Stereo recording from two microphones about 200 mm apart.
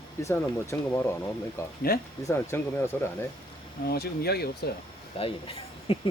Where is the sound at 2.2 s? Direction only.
10° left (ahead or behind).